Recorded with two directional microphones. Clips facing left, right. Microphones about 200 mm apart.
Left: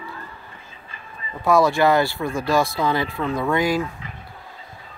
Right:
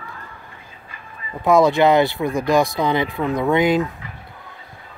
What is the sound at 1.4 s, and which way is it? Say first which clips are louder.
Speech: right 3 dB; 20° right (ahead or behind).